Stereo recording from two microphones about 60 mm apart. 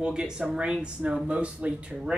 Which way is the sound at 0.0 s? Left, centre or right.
Centre.